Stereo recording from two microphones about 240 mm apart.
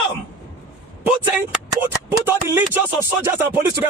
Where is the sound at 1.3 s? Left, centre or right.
Centre.